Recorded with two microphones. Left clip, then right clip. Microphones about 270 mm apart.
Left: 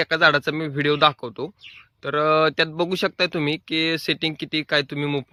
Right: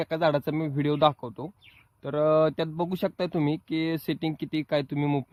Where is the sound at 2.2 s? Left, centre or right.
Centre.